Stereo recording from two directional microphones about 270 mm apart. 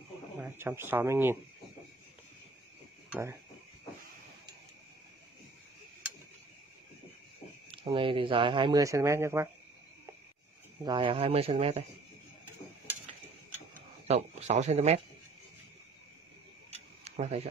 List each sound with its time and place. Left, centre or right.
0.4 s speech: centre
3.1 s a sound: centre
7.7 s speech: centre
10.8 s speech: centre
14.0 s speech: right
16.7 s tick-tock: right